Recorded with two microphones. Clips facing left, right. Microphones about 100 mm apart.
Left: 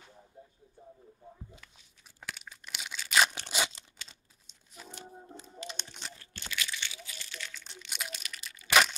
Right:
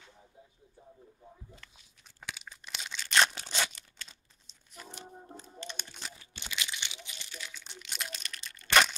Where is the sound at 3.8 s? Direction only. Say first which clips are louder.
Left 1 dB; 20° left (ahead or behind).